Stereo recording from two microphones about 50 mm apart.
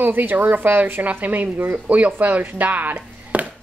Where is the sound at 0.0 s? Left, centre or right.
Right.